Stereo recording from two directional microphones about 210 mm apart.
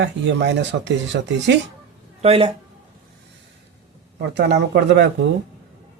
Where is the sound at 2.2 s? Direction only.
25° right (ahead or behind).